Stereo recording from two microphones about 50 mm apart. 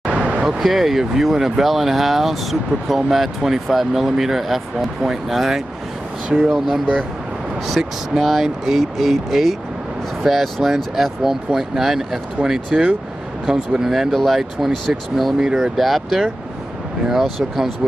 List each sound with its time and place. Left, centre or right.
0.0 s a sound: right
0.6 s speech: centre
15.4 s speech: centre